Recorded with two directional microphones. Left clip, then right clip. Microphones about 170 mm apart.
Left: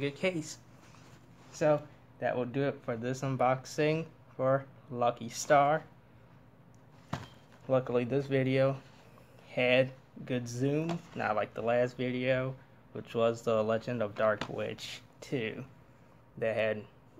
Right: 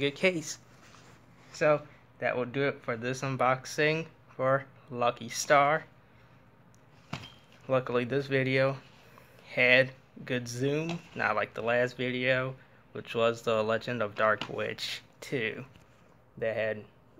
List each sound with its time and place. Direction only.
0.0 s speech: 25° right (ahead or behind)
1.5 s speech: 5° right (ahead or behind)
7.6 s speech: centre (ahead or behind)